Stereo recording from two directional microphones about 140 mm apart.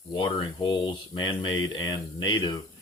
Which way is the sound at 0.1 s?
30° left (ahead or behind).